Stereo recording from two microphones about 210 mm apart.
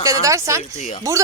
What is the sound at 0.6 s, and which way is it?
Speech, 30° left (ahead or behind).